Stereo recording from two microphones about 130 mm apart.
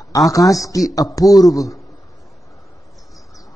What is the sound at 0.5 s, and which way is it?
Speech, 25° left (ahead or behind).